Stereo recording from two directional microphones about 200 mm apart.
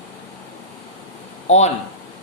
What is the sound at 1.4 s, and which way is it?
Speech, 35° left (ahead or behind).